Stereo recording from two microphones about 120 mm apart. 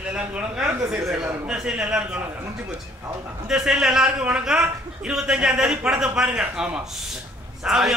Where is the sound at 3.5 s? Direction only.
5° right (ahead or behind).